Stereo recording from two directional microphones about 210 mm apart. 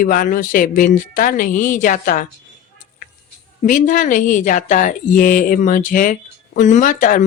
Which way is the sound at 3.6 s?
40° left (ahead or behind).